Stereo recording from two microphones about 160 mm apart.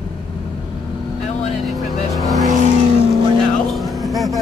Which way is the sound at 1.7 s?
Centre (ahead or behind).